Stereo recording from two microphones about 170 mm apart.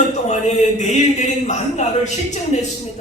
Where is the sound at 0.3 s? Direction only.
40° left (ahead or behind).